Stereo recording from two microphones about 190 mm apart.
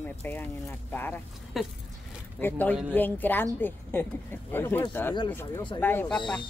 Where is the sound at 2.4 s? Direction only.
10° left (ahead or behind).